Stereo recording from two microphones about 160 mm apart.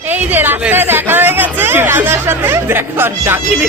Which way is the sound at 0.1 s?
10° right (ahead or behind).